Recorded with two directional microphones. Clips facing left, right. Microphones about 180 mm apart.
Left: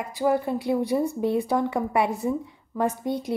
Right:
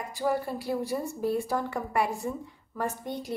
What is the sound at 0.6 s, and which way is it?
Speech, 60° left (ahead or behind).